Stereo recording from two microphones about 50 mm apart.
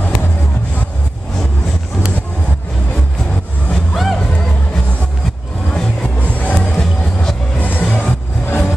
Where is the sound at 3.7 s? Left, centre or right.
Centre.